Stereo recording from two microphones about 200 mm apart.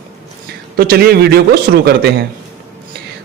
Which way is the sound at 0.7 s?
50° right (ahead or behind).